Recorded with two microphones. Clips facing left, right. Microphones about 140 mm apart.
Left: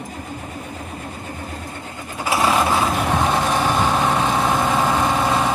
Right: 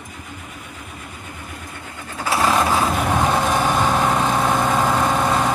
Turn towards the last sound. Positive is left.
turn(degrees=0)  # may be behind; listen again after turning